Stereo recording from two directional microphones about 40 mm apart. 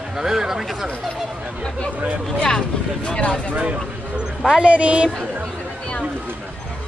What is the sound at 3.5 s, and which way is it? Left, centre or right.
A woman's voice, right.